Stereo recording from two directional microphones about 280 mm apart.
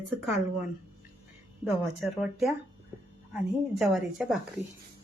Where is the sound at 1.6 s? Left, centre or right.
Centre.